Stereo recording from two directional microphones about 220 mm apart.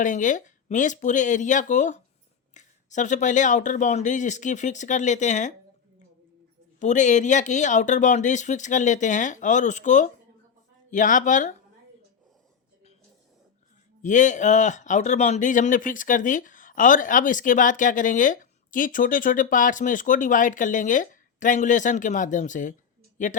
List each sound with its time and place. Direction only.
0.0 s speech: 35° left (ahead or behind)
6.7 s speech: 35° left (ahead or behind)
14.0 s speech: 35° left (ahead or behind)